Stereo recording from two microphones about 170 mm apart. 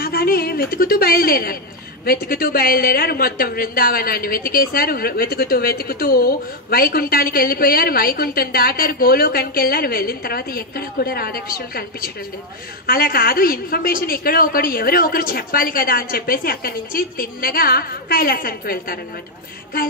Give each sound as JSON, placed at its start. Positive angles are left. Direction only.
{"t": 0.0, "sound": "a woman's voice", "side_deg": 65}